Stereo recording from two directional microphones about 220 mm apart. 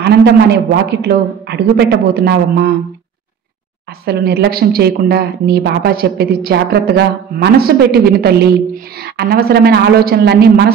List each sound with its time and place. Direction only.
0.0 s speech: 50° right (ahead or behind)
4.0 s speech: 45° right (ahead or behind)